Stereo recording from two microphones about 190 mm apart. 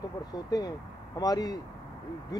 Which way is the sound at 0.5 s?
20° left (ahead or behind).